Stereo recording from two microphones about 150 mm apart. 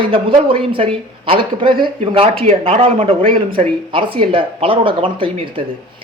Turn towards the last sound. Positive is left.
turn(degrees=-35)  # may be behind; listen again after turning